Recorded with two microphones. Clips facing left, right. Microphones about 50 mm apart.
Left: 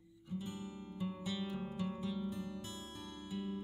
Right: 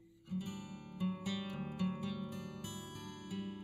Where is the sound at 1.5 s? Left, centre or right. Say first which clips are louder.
Right 1 dB; right.